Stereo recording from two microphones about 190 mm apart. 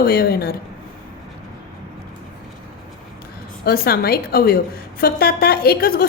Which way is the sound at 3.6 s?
55° left (ahead or behind).